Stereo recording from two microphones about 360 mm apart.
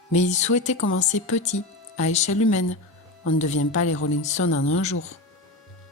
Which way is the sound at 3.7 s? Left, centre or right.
Left.